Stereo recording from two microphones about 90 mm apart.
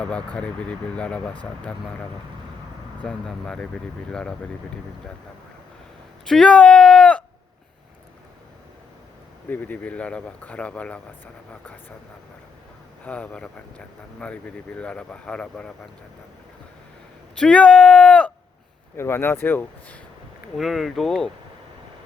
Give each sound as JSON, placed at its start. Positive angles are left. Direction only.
{"t": 0.0, "sound": "speech", "side_deg": 15}
{"t": 3.0, "sound": "speech", "side_deg": 10}
{"t": 6.2, "sound": "speech", "side_deg": 5}
{"t": 9.5, "sound": "speech", "side_deg": 20}
{"t": 13.1, "sound": "speech", "side_deg": 10}
{"t": 17.3, "sound": "speech", "side_deg": 10}
{"t": 18.9, "sound": "speech", "side_deg": 30}
{"t": 20.6, "sound": "speech", "side_deg": 0}